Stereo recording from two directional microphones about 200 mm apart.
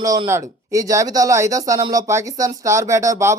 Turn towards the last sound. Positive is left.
turn(degrees=-15)  # may be behind; listen again after turning